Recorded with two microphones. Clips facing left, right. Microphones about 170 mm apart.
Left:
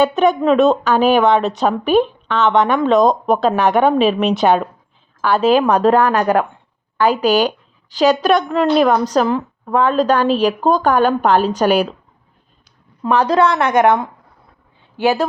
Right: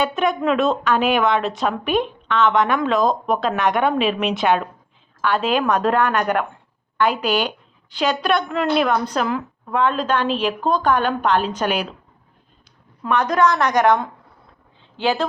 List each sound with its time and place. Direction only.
0.0 s a woman's voice: 40° left (ahead or behind)
13.0 s speech: 30° left (ahead or behind)